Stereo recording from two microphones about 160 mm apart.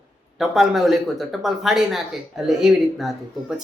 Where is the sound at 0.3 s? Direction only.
Centre (ahead or behind).